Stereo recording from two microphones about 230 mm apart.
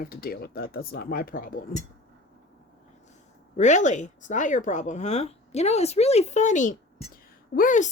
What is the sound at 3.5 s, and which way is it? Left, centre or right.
Speech, left.